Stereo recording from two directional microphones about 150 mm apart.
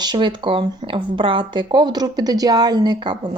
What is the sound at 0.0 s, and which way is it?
A woman's voice, 30° right (ahead or behind).